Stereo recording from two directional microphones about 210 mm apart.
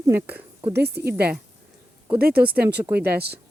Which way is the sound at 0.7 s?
50° right (ahead or behind).